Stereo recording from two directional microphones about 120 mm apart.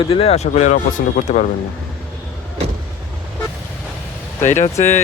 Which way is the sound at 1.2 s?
90° left.